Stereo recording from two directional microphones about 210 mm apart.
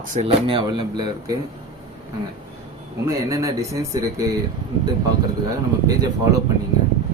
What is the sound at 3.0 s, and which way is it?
Speech, 15° right (ahead or behind).